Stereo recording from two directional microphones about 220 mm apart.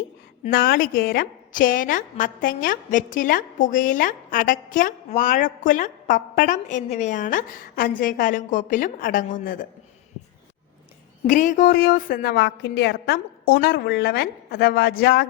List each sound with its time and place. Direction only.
0.5 s a woman's voice: 40° left (ahead or behind)
11.3 s a woman's voice: 35° left (ahead or behind)